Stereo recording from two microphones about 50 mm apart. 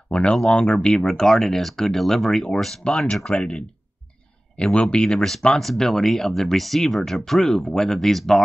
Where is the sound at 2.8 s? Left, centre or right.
Left.